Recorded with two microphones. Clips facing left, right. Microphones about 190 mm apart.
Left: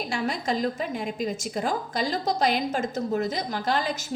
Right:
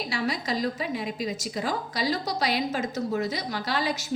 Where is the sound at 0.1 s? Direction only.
50° left (ahead or behind).